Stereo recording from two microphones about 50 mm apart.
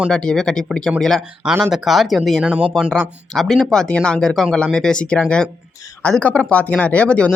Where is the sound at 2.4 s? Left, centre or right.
Right.